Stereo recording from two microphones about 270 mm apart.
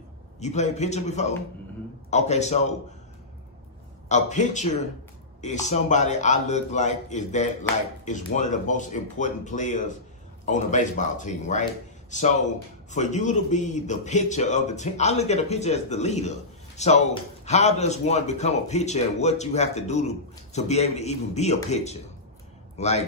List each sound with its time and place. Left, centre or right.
0.3 s a man's voice: left
4.1 s a man's voice: left